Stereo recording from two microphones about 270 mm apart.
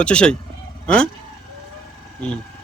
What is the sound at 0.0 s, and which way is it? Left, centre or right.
Speech, centre.